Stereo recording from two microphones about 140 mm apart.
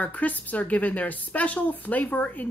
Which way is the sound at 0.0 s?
10° left (ahead or behind).